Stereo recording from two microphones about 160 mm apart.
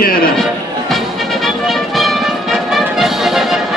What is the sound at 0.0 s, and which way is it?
Music, 65° left (ahead or behind).